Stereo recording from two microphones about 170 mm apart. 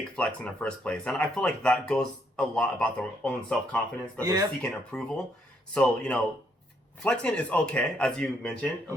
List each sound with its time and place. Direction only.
0.2 s speech: 5° left (ahead or behind)
4.2 s speech: 20° right (ahead or behind)
4.6 s speech: 5° left (ahead or behind)